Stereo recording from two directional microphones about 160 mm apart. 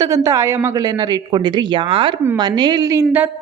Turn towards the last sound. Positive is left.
turn(degrees=-25)  # may be behind; listen again after turning